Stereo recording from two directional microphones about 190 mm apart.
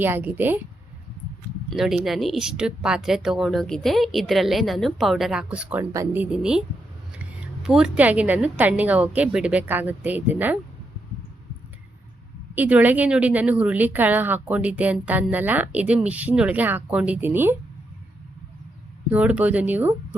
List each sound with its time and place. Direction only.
0.0 s speech: 10° right (ahead or behind)
1.7 s speech: centre (ahead or behind)
5.9 s speech: 15° right (ahead or behind)
6.3 s speech: 5° right (ahead or behind)
12.5 s speech: 10° right (ahead or behind)
19.1 s speech: 5° right (ahead or behind)